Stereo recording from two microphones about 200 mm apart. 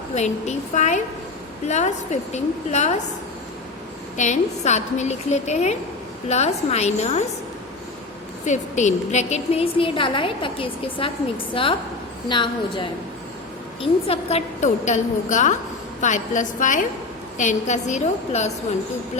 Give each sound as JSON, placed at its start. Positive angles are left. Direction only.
{"t": 0.1, "sound": "a woman's voice", "side_deg": 35}
{"t": 4.2, "sound": "a woman's voice", "side_deg": 35}
{"t": 8.4, "sound": "a woman's voice", "side_deg": 35}